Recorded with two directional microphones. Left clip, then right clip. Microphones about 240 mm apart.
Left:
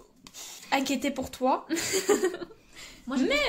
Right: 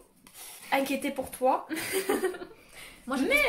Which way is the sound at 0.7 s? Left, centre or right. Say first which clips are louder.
Left 1 dB; left.